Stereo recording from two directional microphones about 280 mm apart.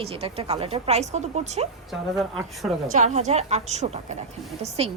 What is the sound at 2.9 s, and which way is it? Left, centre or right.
A woman's voice, right.